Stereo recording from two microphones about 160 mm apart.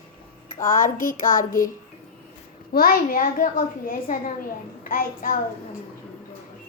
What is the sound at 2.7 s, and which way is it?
A child's voice, 65° left (ahead or behind).